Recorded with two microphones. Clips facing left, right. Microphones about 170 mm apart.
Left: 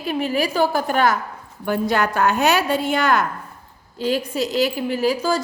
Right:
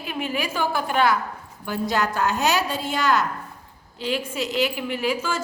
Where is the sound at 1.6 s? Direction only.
55° left (ahead or behind).